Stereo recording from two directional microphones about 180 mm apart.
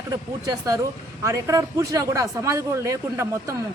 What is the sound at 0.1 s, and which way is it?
Speech, 20° right (ahead or behind).